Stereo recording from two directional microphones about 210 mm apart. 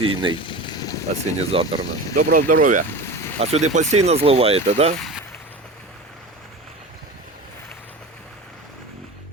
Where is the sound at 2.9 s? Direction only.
10° left (ahead or behind).